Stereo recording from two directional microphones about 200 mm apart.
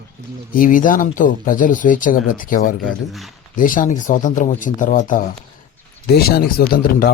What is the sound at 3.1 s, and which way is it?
Speech, centre (ahead or behind).